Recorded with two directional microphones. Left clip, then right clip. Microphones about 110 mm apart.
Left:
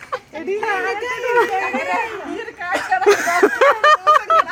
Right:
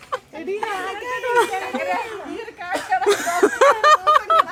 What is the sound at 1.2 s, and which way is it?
Speech, 15° right (ahead or behind).